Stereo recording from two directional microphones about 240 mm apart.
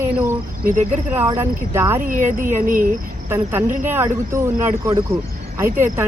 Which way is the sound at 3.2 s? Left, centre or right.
Centre.